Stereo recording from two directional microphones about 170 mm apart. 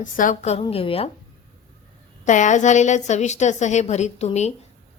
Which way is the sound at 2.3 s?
45° left (ahead or behind).